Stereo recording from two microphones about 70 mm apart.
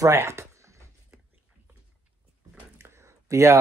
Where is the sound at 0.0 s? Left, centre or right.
Right.